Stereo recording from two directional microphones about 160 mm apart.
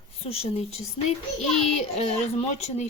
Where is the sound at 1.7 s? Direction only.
45° left (ahead or behind).